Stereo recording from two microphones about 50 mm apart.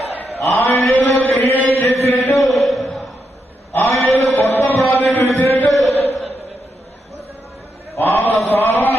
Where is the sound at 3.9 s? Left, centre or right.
Left.